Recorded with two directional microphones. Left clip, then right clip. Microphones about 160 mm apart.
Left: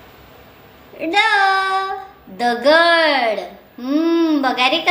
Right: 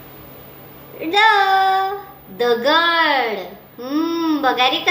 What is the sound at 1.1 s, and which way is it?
Child singing, 55° left (ahead or behind).